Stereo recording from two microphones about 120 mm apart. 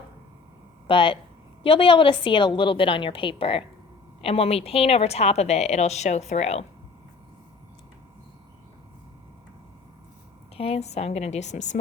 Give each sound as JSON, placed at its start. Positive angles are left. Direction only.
{"t": 0.9, "sound": "a woman's voice", "side_deg": 45}
{"t": 10.6, "sound": "a woman's voice", "side_deg": 60}